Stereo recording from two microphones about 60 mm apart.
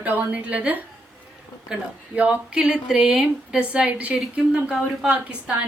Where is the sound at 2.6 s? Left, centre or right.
Centre.